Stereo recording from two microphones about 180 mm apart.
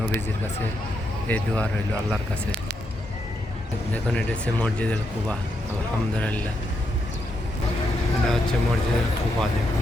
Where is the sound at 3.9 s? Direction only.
5° left (ahead or behind).